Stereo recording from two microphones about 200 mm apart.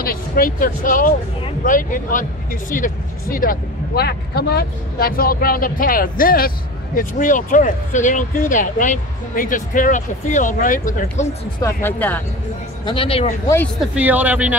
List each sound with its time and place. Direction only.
0.0 s speech: 45° left (ahead or behind)
11.6 s speech: 10° left (ahead or behind)
12.8 s a man's voice: 25° left (ahead or behind)
13.7 s speech: 5° right (ahead or behind)